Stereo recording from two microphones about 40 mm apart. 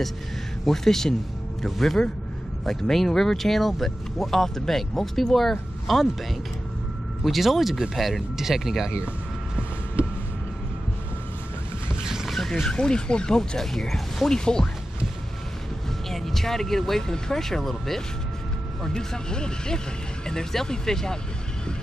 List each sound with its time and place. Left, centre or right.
0.7 s speech: centre
7.2 s speech: centre
12.3 s a sound: centre
12.6 s speech: centre
16.1 s speech: centre
18.9 s speech: centre